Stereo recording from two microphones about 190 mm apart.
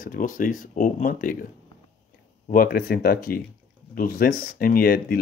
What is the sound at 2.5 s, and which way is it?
Speech, 50° left (ahead or behind).